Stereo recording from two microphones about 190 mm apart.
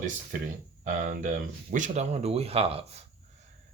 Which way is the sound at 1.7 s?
40° right (ahead or behind).